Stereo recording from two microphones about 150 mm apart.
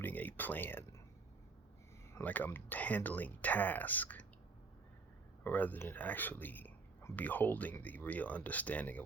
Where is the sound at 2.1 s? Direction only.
10° left (ahead or behind).